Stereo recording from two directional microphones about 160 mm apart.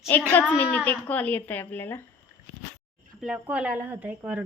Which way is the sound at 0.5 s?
10° left (ahead or behind).